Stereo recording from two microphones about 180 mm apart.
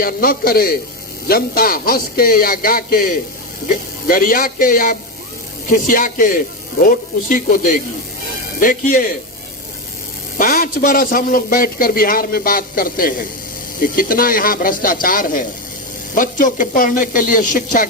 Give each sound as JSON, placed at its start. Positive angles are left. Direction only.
{"t": 0.0, "sound": "a man's voice", "side_deg": 55}
{"t": 4.1, "sound": "a man's voice", "side_deg": 50}
{"t": 10.3, "sound": "a man's voice", "side_deg": 50}